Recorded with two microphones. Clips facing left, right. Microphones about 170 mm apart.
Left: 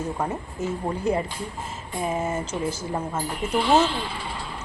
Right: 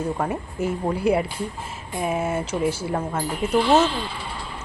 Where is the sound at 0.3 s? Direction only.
10° right (ahead or behind).